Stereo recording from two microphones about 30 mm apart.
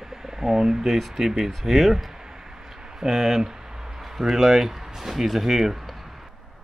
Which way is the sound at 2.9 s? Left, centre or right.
Centre.